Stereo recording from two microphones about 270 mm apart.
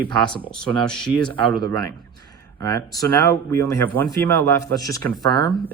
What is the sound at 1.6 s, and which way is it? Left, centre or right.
Speech, centre.